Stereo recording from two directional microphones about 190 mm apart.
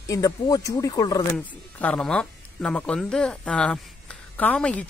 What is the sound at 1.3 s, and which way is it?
Speech, 5° left (ahead or behind).